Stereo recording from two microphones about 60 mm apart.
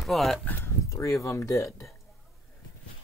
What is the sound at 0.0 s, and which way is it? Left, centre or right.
Speech, centre.